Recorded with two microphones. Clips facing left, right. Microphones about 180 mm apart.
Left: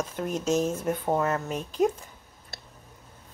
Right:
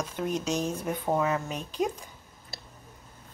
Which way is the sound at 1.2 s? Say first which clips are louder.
Left 1 dB; 5° right (ahead or behind).